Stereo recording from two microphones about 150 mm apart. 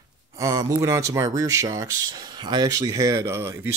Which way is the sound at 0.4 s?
20° right (ahead or behind).